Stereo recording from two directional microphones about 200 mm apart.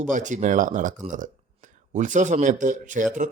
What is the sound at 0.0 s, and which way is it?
Speech, 40° right (ahead or behind).